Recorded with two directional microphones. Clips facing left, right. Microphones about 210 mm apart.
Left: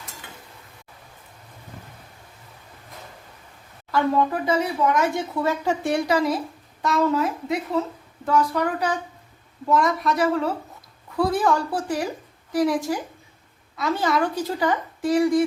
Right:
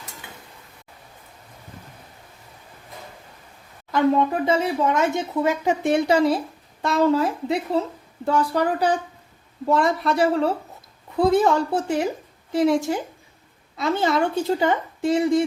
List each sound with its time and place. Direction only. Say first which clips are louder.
3.9 s speech: right 2 dB; 20° right (ahead or behind)